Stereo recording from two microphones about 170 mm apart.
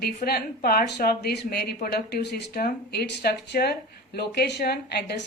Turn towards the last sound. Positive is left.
turn(degrees=75)  # may be behind; listen again after turning